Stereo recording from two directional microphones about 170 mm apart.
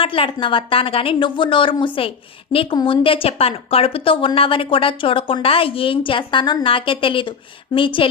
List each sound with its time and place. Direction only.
0.0 s a woman's voice: 30° left (ahead or behind)